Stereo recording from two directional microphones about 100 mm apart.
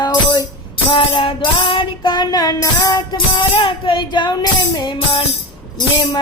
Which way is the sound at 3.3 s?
55° left (ahead or behind).